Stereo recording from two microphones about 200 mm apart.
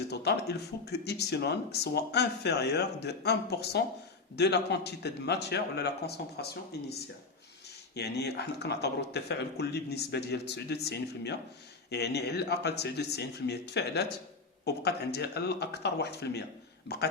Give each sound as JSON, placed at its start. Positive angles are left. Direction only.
{"t": 0.1, "sound": "speech", "side_deg": 55}
{"t": 7.9, "sound": "speech", "side_deg": 55}